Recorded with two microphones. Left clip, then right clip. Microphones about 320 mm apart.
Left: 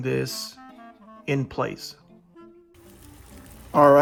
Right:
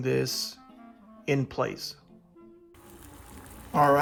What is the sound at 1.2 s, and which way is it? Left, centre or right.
Speech, centre.